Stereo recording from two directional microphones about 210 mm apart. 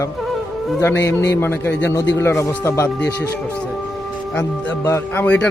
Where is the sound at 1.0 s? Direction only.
55° left (ahead or behind).